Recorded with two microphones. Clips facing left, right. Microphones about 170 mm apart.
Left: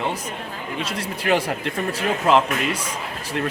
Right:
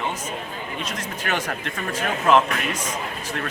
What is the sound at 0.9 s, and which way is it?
Speech, 30° left (ahead or behind).